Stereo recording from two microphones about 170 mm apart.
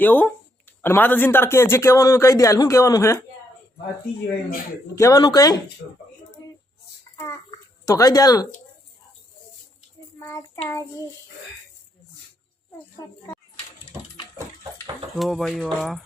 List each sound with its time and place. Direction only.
0.0 s speech: 10° left (ahead or behind)
4.9 s speech: 20° left (ahead or behind)
7.9 s speech: 20° left (ahead or behind)
10.2 s child singing: 15° left (ahead or behind)
15.2 s speech: centre (ahead or behind)